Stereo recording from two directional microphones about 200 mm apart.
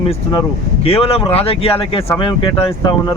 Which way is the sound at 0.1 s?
30° left (ahead or behind).